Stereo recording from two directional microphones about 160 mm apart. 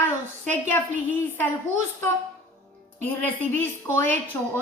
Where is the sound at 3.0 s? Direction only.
10° left (ahead or behind).